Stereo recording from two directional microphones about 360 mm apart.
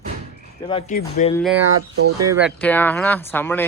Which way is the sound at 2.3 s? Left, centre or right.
Centre.